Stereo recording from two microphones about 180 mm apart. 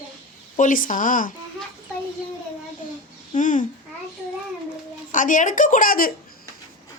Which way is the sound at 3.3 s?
45° left (ahead or behind).